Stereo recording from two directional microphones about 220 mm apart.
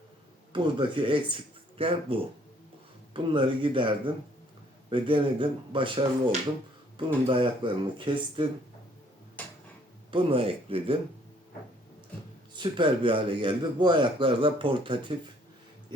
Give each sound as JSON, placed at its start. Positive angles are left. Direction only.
{"t": 0.5, "sound": "speech", "side_deg": -20}
{"t": 10.1, "sound": "speech", "side_deg": -25}
{"t": 12.5, "sound": "speech", "side_deg": -20}